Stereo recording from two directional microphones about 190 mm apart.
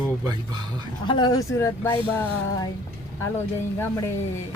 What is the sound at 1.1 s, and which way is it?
Speech, 25° left (ahead or behind).